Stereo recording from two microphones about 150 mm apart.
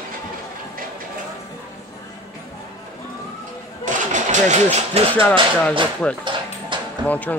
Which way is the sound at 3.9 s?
55° right (ahead or behind).